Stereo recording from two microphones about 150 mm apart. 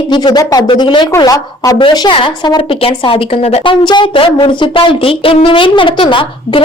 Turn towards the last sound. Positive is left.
turn(degrees=35)  # may be behind; listen again after turning